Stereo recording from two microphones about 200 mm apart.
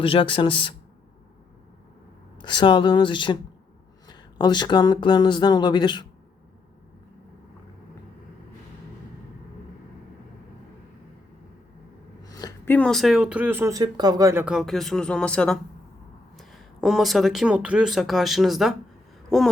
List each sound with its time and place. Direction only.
0.0 s speech: 25° left (ahead or behind)
2.4 s speech: 25° left (ahead or behind)
12.2 s a sound: 20° left (ahead or behind)
12.7 s speech: 5° left (ahead or behind); by 14.4 s 15° right (ahead or behind)
14.4 s speech: centre (ahead or behind)